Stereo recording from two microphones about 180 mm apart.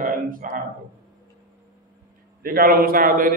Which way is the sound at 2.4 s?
55° right (ahead or behind).